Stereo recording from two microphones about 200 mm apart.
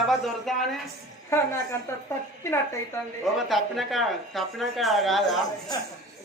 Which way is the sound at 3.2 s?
Centre (ahead or behind).